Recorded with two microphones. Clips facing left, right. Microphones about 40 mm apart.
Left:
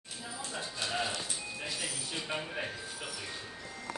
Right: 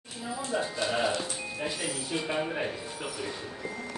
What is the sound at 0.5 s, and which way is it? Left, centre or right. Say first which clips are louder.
Music: right 8 dB; centre.